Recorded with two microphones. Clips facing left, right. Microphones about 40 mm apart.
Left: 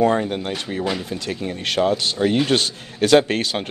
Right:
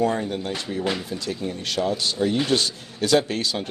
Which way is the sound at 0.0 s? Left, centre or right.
Left.